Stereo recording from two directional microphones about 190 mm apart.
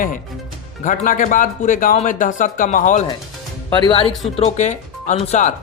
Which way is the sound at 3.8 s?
25° left (ahead or behind).